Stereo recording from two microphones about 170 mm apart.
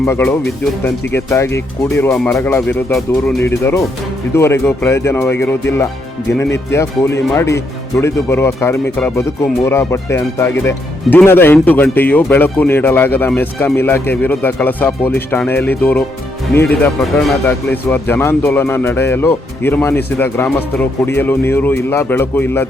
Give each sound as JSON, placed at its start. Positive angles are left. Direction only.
{"t": 0.0, "sound": "speech", "side_deg": 15}
{"t": 17.4, "sound": "speech", "side_deg": 10}